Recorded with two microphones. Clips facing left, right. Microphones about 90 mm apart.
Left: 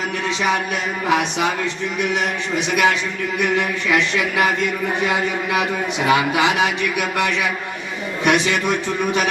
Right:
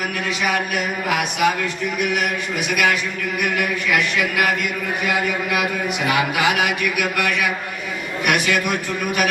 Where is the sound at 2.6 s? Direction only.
25° left (ahead or behind).